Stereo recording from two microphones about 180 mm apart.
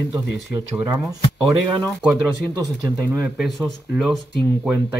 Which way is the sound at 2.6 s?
15° right (ahead or behind).